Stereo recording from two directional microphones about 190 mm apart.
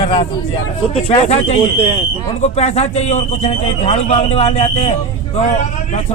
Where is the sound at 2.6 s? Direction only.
35° left (ahead or behind).